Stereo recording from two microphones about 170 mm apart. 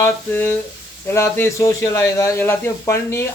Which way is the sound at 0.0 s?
10° left (ahead or behind).